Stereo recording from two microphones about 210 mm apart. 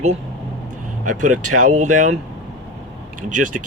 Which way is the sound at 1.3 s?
90° right.